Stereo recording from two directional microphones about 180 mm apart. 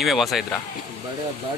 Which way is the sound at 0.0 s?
Centre (ahead or behind).